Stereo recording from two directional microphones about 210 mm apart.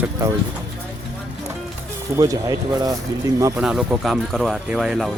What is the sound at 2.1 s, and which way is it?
Speech, 15° right (ahead or behind).